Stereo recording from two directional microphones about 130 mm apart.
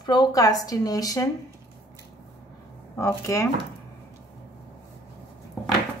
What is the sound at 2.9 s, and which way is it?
Speech, 25° left (ahead or behind).